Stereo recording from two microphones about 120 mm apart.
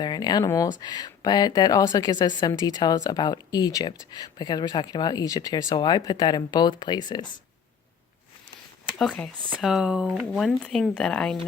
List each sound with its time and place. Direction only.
0.0 s speech: 35° left (ahead or behind)
9.0 s speech: 5° left (ahead or behind)